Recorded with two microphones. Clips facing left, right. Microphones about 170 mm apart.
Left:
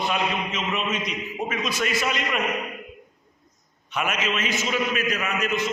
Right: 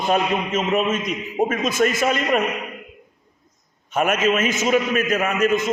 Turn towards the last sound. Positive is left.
turn(degrees=-45)  # may be behind; listen again after turning